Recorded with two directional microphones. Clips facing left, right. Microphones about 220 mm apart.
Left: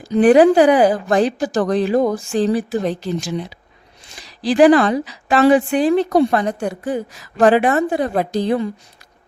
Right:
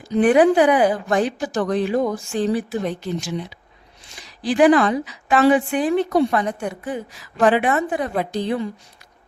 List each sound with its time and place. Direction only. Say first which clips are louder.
0.0 s a woman's voice: left 4 dB; 35° left (ahead or behind)
4.4 s a woman's voice: left 3 dB; 35° left (ahead or behind)